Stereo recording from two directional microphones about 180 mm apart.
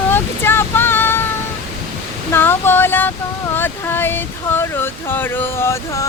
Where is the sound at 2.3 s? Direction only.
10° left (ahead or behind).